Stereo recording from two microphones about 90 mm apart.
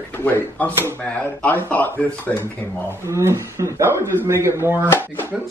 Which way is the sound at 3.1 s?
30° right (ahead or behind).